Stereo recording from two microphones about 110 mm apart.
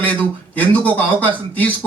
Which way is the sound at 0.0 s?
15° left (ahead or behind).